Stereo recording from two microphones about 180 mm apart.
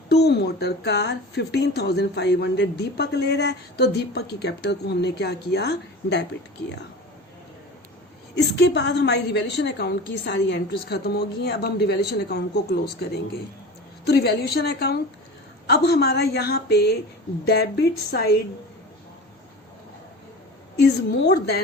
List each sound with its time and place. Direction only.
0.1 s speech: 65° left (ahead or behind)
8.4 s a woman's voice: 70° left (ahead or behind)